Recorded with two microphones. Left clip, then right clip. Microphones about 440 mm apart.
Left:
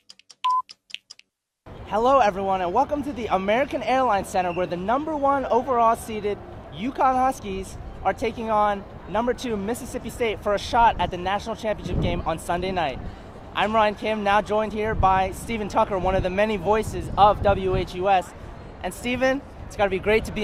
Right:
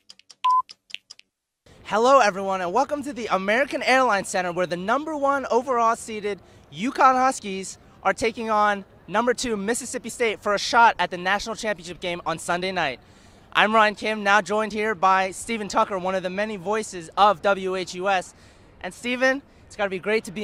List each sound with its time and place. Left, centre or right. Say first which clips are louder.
0.4 s telephone dialing: right 3 dB; centre
1.9 s speech: right 1 dB; right